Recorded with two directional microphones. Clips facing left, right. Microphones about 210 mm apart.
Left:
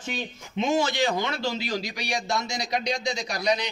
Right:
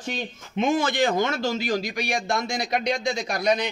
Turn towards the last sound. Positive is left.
turn(degrees=-50)  # may be behind; listen again after turning